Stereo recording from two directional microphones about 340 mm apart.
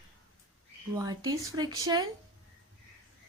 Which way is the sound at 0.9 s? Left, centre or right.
Centre.